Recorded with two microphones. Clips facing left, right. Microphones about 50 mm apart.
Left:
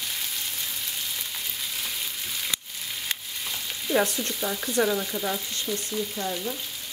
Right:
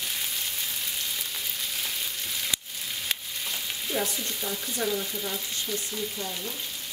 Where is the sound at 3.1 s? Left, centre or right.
Centre.